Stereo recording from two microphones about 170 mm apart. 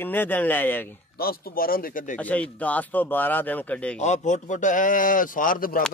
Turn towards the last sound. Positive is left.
turn(degrees=55)  # may be behind; listen again after turning